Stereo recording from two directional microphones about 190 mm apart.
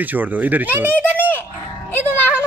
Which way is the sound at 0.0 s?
10° right (ahead or behind).